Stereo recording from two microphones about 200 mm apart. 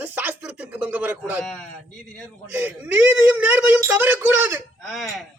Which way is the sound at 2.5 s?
10° right (ahead or behind).